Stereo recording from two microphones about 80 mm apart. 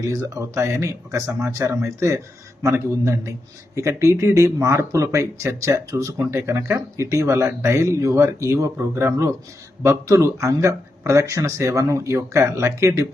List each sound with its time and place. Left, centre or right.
0.0 s speech: right